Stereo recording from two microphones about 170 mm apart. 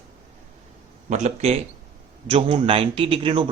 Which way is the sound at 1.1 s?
40° right (ahead or behind).